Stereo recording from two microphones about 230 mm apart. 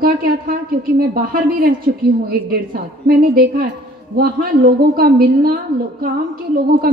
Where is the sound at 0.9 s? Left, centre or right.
Right.